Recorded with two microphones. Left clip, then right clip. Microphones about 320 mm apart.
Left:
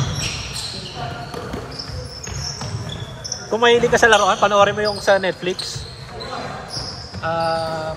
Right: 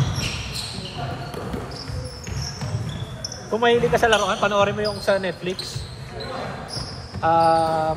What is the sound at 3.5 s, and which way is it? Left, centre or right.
Speech, left.